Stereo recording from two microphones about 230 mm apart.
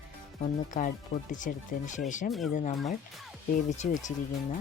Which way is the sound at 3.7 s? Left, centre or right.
Left.